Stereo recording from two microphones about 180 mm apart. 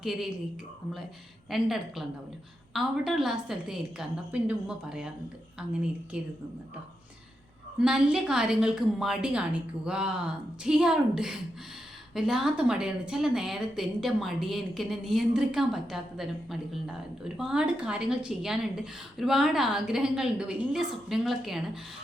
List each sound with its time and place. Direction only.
0.0 s a woman's voice: centre (ahead or behind)
1.5 s a woman's voice: centre (ahead or behind)
6.1 s a woman's voice: 5° right (ahead or behind)
7.8 s a woman's voice: 5° right (ahead or behind)